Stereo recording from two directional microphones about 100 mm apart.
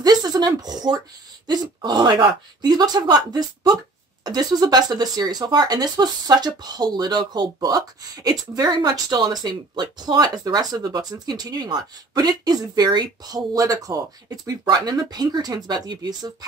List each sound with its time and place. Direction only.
0.0 s speech: 40° right (ahead or behind)